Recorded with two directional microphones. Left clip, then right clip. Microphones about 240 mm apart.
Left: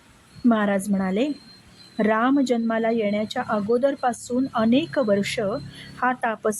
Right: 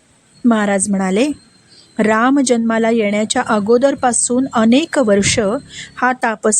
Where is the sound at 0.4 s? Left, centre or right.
Centre.